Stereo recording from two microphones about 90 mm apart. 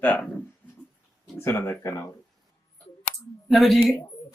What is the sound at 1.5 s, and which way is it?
Speech, 30° left (ahead or behind).